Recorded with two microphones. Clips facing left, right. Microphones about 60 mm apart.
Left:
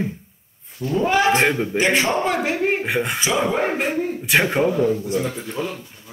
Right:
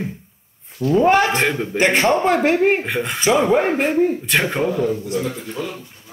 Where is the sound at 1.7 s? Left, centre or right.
Right.